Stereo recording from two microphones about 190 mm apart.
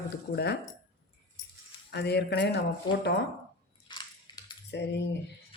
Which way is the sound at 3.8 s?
25° left (ahead or behind).